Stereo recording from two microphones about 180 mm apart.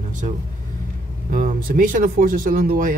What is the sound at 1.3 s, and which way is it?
Speech, 50° right (ahead or behind).